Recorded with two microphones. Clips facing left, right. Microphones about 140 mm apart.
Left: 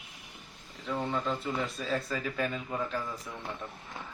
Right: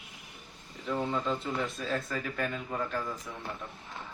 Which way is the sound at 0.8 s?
Centre (ahead or behind).